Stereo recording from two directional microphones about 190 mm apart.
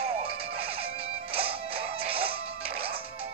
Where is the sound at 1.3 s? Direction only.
30° right (ahead or behind).